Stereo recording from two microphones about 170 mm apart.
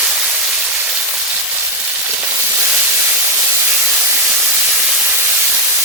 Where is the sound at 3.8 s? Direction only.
15° right (ahead or behind).